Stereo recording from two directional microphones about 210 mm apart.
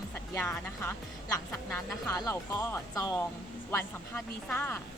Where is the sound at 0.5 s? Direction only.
10° left (ahead or behind).